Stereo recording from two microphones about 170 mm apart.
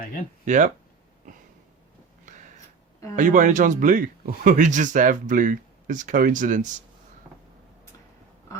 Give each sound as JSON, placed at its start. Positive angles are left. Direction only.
{"t": 0.4, "sound": "speech", "side_deg": -45}
{"t": 3.2, "sound": "speech", "side_deg": -50}
{"t": 7.3, "sound": "vehicle", "side_deg": -10}